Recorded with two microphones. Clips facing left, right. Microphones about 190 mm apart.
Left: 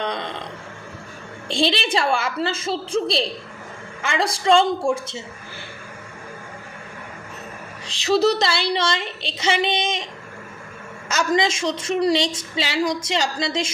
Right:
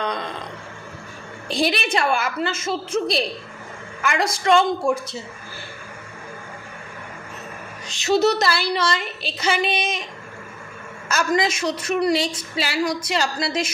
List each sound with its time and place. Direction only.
0.0 s a sound: 25° left (ahead or behind)
1.5 s a woman's voice: 25° left (ahead or behind)
7.9 s a woman's voice: 30° left (ahead or behind)
11.1 s a woman's voice: 25° left (ahead or behind)